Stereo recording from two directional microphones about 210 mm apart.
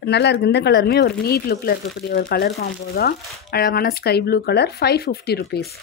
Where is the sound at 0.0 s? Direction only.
50° left (ahead or behind).